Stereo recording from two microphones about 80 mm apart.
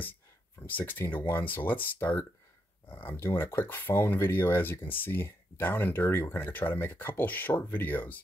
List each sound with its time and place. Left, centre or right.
0.6 s speech: left
3.2 s speech: left